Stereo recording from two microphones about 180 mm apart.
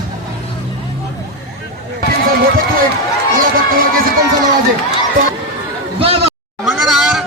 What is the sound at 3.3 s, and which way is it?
Run, 50° right (ahead or behind).